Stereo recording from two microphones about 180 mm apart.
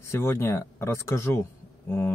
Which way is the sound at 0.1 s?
15° left (ahead or behind).